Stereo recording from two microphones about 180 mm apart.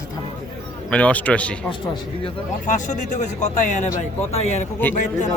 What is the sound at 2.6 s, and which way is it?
Speech, 45° left (ahead or behind).